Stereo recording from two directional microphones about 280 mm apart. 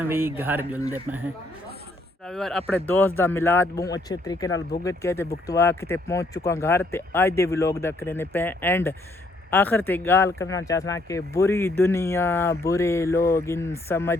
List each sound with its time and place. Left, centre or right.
0.0 s speech: centre
2.2 s speech: centre